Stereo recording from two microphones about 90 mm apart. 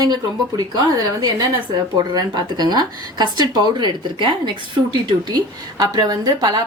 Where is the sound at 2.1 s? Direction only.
50° right (ahead or behind).